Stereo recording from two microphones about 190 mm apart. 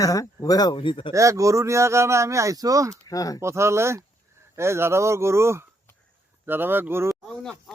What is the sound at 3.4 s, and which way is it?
A man's voice, 15° right (ahead or behind).